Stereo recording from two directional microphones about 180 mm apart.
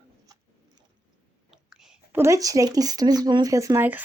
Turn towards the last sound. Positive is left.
turn(degrees=-10)  # may be behind; listen again after turning